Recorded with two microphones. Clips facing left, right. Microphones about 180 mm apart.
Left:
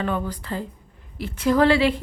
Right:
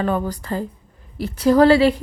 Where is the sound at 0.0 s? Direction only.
40° right (ahead or behind).